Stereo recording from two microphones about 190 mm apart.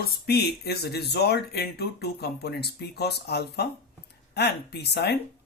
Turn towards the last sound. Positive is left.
turn(degrees=60)  # may be behind; listen again after turning